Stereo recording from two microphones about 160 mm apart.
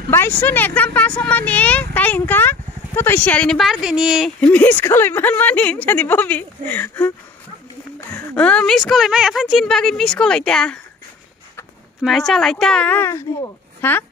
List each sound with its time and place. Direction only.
0.1 s speech: 15° left (ahead or behind); by 4.3 s 5° right (ahead or behind)
4.4 s speech: 10° left (ahead or behind)
8.4 s speech: 5° left (ahead or behind)
12.0 s speech: centre (ahead or behind)